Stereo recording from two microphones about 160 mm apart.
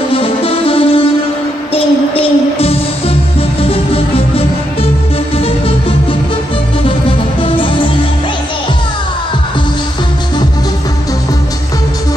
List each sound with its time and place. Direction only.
0.1 s music: 35° left (ahead or behind)